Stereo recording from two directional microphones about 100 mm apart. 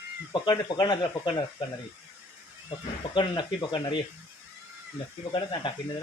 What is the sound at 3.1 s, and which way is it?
Speech, 50° left (ahead or behind).